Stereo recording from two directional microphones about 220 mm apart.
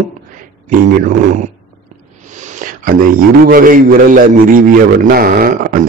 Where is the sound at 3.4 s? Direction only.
40° right (ahead or behind).